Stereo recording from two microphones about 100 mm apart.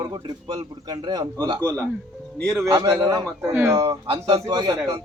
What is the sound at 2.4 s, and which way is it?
Speech, 10° left (ahead or behind).